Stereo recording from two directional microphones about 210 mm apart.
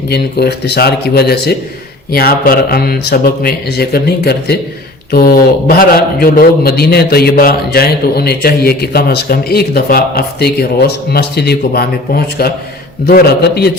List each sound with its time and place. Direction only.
0.1 s a man's voice: 50° left (ahead or behind)